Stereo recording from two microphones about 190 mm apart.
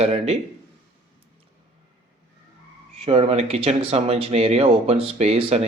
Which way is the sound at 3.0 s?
30° right (ahead or behind).